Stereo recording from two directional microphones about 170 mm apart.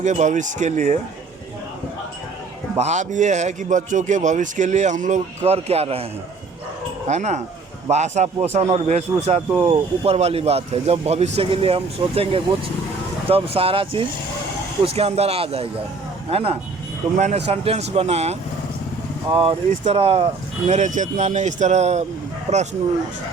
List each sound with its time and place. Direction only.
0.0 s a man's voice: 45° right (ahead or behind)
2.7 s a man's voice: 45° right (ahead or behind)
7.1 s a man's voice: 45° right (ahead or behind)